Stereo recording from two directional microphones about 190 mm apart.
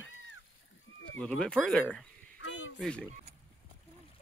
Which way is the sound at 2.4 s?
90° left.